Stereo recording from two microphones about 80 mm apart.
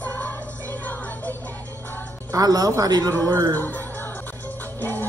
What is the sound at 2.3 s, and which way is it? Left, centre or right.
Speech, right.